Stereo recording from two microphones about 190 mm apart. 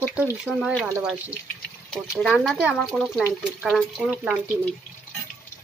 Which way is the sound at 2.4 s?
Centre (ahead or behind).